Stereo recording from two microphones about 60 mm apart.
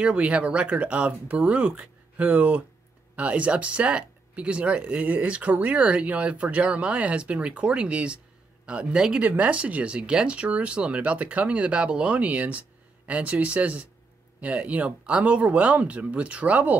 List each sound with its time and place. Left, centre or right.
0.0 s speech: centre
9.2 s speech: right